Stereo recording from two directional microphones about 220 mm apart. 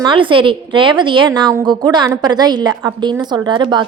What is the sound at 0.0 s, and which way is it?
A woman's voice, 20° right (ahead or behind).